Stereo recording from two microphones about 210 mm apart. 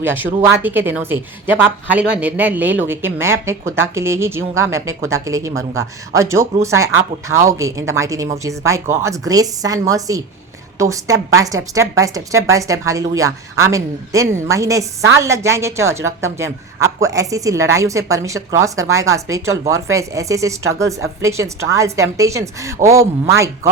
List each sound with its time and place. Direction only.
0.0 s a woman's voice: 10° right (ahead or behind)